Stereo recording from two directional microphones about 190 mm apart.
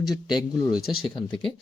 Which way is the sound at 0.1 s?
20° left (ahead or behind).